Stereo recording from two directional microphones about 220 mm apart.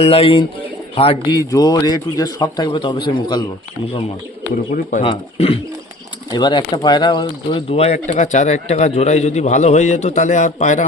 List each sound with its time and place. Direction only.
0.0 s a man's voice: 25° left (ahead or behind)
4.7 s a man's voice: 35° left (ahead or behind)